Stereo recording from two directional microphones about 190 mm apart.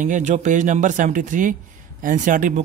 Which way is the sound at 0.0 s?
40° right (ahead or behind).